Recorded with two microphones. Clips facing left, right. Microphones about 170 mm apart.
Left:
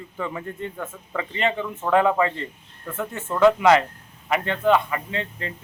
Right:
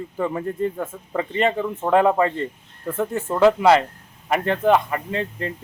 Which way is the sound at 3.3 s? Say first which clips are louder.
Right 1 dB; 30° right (ahead or behind).